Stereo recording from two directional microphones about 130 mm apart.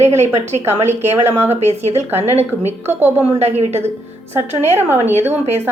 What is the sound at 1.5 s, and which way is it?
Speech, 55° right (ahead or behind).